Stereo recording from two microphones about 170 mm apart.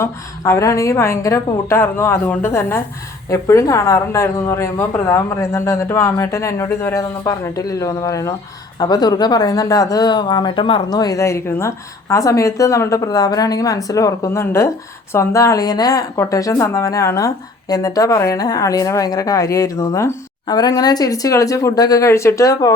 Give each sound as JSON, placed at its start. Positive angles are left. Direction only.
{"t": 0.0, "sound": "a woman's voice", "side_deg": 15}